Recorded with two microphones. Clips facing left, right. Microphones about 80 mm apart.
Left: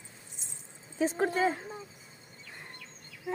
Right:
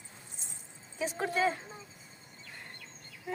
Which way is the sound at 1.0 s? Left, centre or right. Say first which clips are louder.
Left 3 dB; left.